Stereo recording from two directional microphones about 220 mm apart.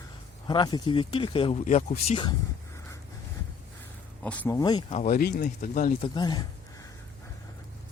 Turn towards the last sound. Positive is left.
turn(degrees=20)  # may be behind; listen again after turning